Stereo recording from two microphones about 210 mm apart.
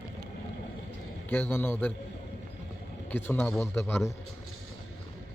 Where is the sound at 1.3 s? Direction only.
10° left (ahead or behind).